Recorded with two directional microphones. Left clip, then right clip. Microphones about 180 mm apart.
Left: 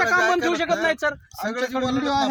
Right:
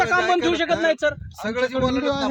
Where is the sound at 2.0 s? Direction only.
50° right (ahead or behind).